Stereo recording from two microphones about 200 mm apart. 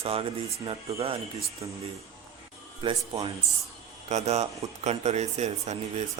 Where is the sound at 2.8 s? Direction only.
25° right (ahead or behind).